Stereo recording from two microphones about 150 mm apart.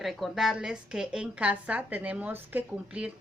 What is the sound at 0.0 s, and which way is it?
A woman's voice, centre (ahead or behind).